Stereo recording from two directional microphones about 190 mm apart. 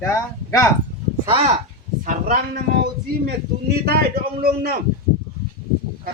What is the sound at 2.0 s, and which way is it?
Speech, 45° right (ahead or behind).